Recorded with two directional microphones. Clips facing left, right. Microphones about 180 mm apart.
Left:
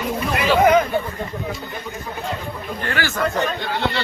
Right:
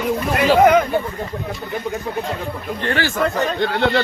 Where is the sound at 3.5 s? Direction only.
50° right (ahead or behind).